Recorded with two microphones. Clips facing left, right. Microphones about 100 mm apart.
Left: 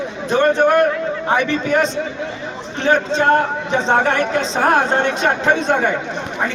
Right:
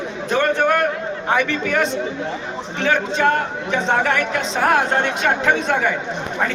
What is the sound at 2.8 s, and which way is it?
Speech, 30° left (ahead or behind).